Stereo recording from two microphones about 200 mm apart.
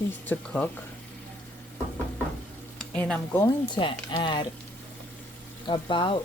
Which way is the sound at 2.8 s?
5° left (ahead or behind).